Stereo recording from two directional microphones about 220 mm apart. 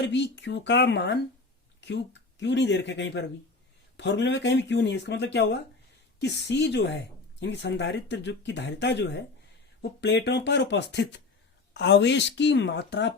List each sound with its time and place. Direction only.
0.0 s speech: 55° left (ahead or behind)